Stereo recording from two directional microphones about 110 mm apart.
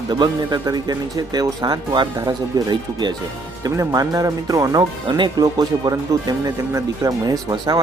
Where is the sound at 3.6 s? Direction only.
30° right (ahead or behind).